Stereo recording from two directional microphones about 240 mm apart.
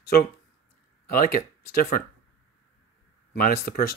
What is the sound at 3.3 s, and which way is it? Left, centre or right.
Speech, left.